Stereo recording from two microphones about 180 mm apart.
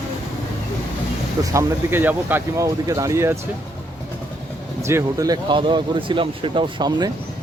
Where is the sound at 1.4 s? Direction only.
15° right (ahead or behind).